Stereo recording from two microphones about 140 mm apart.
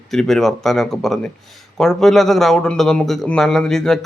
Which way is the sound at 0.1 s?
5° left (ahead or behind).